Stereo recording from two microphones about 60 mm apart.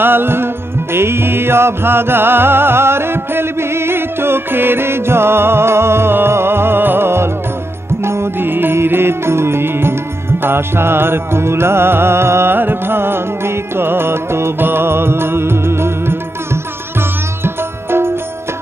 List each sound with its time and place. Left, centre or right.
0.0 s music: right